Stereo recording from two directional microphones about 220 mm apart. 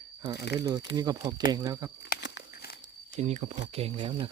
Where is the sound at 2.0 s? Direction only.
50° left (ahead or behind).